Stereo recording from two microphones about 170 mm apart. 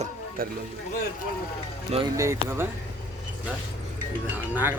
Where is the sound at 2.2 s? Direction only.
15° right (ahead or behind).